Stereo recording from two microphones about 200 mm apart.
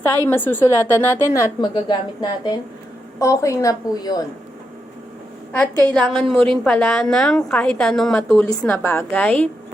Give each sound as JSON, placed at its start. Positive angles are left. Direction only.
{"t": 0.3, "sound": "a woman's voice", "side_deg": 10}
{"t": 5.5, "sound": "a woman's voice", "side_deg": 5}